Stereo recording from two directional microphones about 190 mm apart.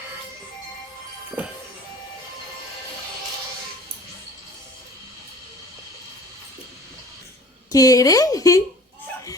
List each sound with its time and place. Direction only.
7.7 s a woman's voice: 20° left (ahead or behind)